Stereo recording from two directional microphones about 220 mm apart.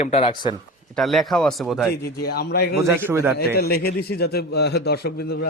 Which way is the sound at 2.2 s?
45° left (ahead or behind).